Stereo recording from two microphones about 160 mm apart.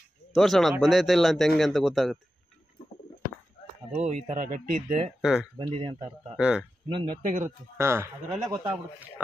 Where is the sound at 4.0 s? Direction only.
45° right (ahead or behind).